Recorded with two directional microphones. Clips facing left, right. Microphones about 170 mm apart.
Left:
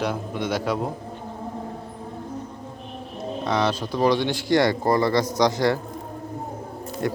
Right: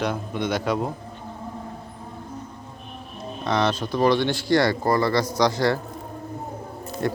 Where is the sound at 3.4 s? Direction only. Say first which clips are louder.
Right 1 dB; 10° left (ahead or behind).